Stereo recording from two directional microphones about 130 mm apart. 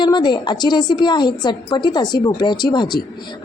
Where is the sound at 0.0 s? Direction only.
35° left (ahead or behind).